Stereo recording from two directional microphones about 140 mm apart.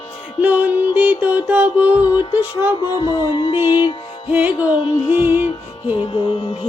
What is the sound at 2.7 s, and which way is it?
Music, 30° left (ahead or behind).